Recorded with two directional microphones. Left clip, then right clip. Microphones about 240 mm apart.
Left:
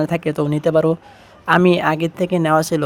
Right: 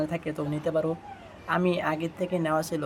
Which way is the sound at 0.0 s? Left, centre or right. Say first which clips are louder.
Left 11 dB; left.